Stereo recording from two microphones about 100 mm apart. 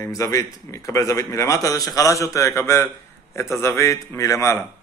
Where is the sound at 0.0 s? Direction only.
30° left (ahead or behind).